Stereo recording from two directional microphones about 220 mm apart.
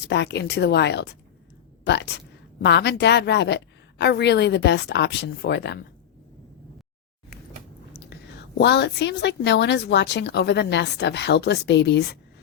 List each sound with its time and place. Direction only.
0.1 s speech: 50° left (ahead or behind)
8.5 s speech: 50° left (ahead or behind)